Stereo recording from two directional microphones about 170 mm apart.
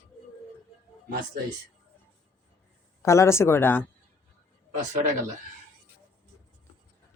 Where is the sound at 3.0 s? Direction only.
15° left (ahead or behind).